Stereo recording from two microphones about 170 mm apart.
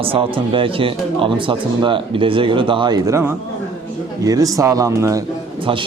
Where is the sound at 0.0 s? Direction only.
30° right (ahead or behind); by 5.2 s 15° right (ahead or behind).